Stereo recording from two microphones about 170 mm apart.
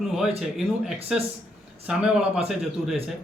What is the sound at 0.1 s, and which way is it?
Speech, centre (ahead or behind).